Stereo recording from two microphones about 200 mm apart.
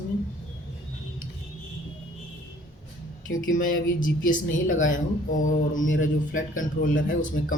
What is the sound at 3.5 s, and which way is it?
Speech, 45° left (ahead or behind).